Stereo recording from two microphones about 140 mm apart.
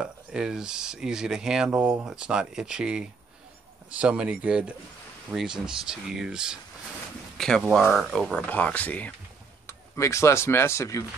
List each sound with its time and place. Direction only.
0.0 s speech: 5° right (ahead or behind); by 11.1 s 20° left (ahead or behind)